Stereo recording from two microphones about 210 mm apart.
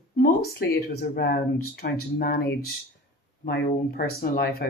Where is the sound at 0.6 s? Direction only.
50° left (ahead or behind).